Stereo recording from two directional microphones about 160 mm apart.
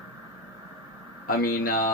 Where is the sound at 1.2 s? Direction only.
65° left (ahead or behind).